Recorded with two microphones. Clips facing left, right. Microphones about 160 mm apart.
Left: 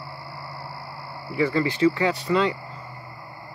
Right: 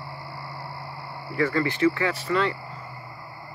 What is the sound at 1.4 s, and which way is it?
Speech, 15° left (ahead or behind).